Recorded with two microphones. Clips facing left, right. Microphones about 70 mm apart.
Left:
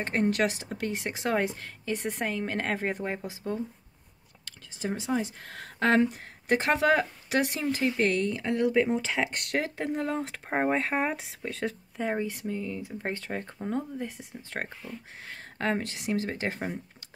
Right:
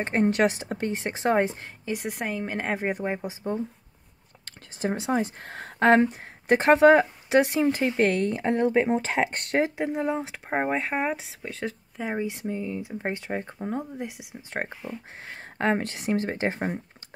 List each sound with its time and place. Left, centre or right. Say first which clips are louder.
0.0 s speech: right 4 dB; right
1.9 s speech: right 1 dB; centre
4.5 s speech: right 4 dB; right
9.2 s speech: right 5 dB; right
9.8 s speech: right 3 dB; centre
12.3 s speech: right 3 dB; right
14.5 s speech: right 4 dB; right
15.8 s speech: right 3 dB; right